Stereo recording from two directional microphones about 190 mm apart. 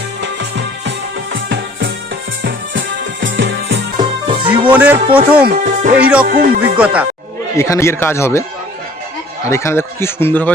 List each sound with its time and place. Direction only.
0.2 s music: 65° right (ahead or behind)
3.9 s music: 25° right (ahead or behind)
4.7 s speech: 10° right (ahead or behind)
4.9 s speech: 30° right (ahead or behind)
5.5 s speech: 45° right (ahead or behind)
6.2 s music: 45° right (ahead or behind)
6.7 s speech: 5° right (ahead or behind)
7.5 s speech: 15° left (ahead or behind)
9.5 s speech: 15° left (ahead or behind)